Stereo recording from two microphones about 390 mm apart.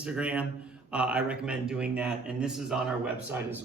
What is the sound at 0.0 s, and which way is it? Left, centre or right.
A man's voice, centre.